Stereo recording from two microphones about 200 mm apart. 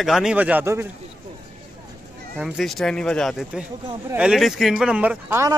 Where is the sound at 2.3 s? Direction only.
5° right (ahead or behind).